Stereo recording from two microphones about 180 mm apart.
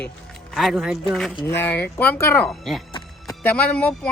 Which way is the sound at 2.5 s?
Centre (ahead or behind).